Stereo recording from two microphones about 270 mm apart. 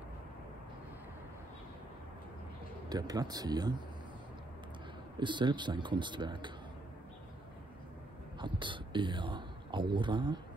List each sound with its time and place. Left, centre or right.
2.9 s a man's voice: centre
5.2 s a man's voice: centre
8.4 s speech: centre